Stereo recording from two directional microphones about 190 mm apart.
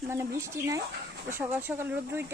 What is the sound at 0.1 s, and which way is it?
Speech, 15° right (ahead or behind).